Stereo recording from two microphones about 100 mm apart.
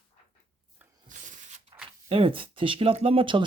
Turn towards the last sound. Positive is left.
turn(degrees=-60)  # may be behind; listen again after turning